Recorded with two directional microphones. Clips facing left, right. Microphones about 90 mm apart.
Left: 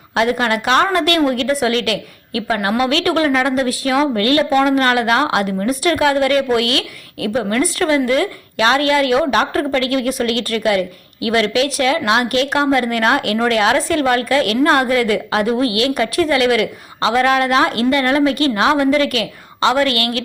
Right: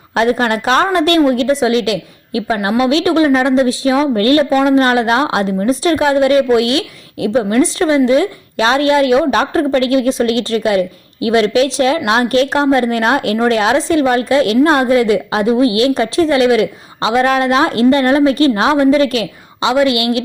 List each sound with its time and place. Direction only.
0.1 s a woman's voice: 30° right (ahead or behind)
19.6 s a woman's voice: 20° right (ahead or behind)